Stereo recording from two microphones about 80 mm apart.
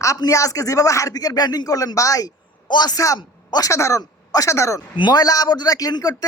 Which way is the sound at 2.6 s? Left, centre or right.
Left.